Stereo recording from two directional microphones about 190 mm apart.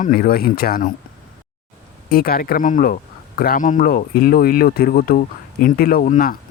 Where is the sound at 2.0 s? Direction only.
50° left (ahead or behind).